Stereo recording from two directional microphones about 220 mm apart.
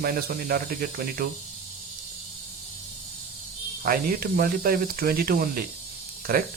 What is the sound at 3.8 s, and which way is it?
Speech, 40° right (ahead or behind).